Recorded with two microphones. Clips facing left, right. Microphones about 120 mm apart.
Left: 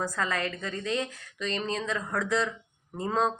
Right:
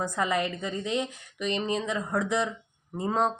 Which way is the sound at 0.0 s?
15° right (ahead or behind).